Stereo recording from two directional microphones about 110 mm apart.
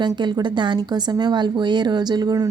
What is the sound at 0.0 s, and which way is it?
A woman's voice, 45° right (ahead or behind).